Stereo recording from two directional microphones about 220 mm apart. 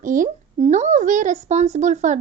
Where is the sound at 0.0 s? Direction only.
35° right (ahead or behind).